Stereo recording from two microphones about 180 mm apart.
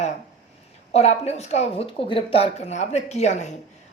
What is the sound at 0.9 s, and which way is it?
A man's voice, 35° left (ahead or behind).